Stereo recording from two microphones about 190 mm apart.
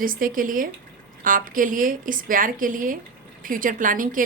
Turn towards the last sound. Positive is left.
turn(degrees=-45)  # may be behind; listen again after turning